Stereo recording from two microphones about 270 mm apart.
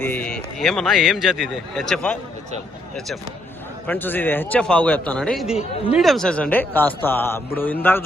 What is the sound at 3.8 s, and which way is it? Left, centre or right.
A man's voice, centre.